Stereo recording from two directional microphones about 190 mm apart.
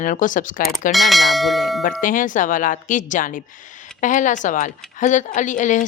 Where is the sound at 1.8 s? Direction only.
45° left (ahead or behind).